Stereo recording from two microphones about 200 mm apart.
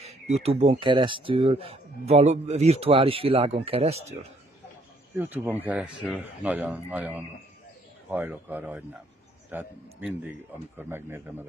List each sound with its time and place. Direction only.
0.3 s speech: 30° right (ahead or behind)
5.1 s a man's voice: 10° right (ahead or behind)